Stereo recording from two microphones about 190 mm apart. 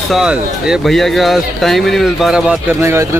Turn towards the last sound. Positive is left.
turn(degrees=-15)  # may be behind; listen again after turning